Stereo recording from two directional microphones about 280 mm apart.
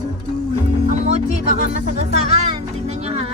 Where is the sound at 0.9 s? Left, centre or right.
Right.